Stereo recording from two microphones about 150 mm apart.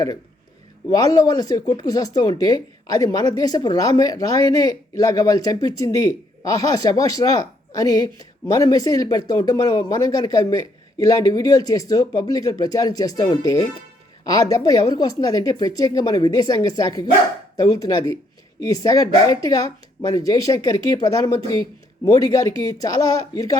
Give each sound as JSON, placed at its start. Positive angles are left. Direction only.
{"t": 0.9, "sound": "a woman's voice", "side_deg": 25}